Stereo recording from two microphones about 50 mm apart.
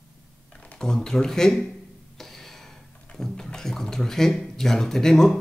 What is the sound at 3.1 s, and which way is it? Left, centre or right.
Speech, centre.